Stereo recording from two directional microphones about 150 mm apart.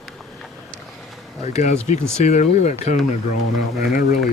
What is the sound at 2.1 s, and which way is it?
Speech, 50° left (ahead or behind).